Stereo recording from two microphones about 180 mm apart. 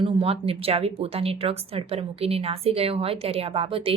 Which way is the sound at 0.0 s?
30° right (ahead or behind).